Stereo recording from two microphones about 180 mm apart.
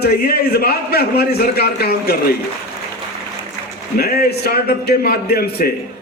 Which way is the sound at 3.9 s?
60° left (ahead or behind).